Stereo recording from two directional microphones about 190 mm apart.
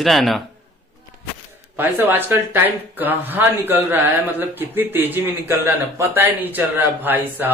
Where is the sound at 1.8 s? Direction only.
10° right (ahead or behind).